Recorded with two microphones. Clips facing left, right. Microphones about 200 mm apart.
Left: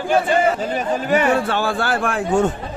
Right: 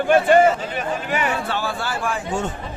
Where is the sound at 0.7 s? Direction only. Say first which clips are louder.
Left 6 dB; 40° left (ahead or behind); by 2.5 s 60° left (ahead or behind).